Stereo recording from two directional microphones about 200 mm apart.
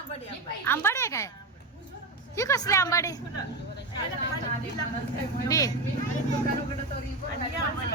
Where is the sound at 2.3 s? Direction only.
15° left (ahead or behind).